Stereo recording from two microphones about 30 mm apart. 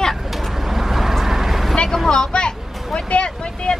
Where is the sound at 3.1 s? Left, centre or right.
Left.